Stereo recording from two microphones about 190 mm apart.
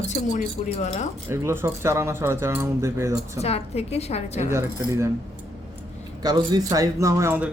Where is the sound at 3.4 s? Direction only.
35° left (ahead or behind).